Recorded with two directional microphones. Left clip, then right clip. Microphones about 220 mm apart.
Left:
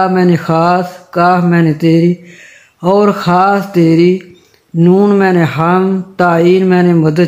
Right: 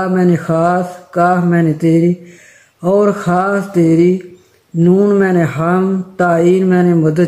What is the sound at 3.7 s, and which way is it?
Mantra, 30° left (ahead or behind).